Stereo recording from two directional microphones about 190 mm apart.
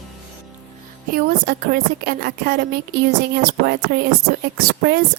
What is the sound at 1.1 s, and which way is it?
A woman's voice, 50° right (ahead or behind).